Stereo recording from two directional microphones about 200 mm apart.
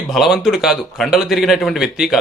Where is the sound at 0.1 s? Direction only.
Centre (ahead or behind).